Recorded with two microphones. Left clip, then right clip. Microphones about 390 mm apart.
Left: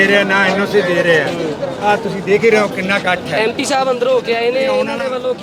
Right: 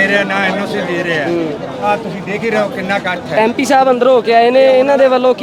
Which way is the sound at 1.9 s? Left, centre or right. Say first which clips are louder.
Left 4 dB; centre.